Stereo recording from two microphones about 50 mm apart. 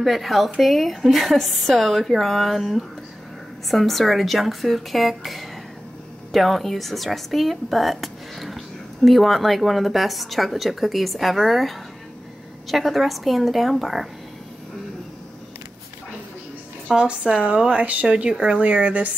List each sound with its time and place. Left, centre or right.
0.0 s speech: centre
16.9 s a woman's voice: right